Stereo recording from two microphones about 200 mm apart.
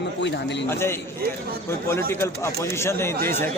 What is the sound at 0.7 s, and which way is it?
A man's voice, 10° left (ahead or behind).